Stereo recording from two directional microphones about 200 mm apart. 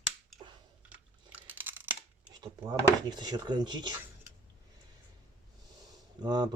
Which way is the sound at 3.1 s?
20° right (ahead or behind).